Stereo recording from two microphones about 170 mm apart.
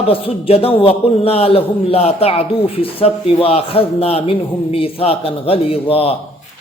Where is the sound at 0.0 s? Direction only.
35° left (ahead or behind).